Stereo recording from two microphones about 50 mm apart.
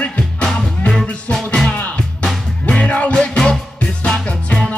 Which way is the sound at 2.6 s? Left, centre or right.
Left.